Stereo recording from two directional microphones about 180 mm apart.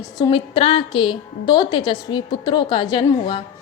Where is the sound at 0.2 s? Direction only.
30° left (ahead or behind).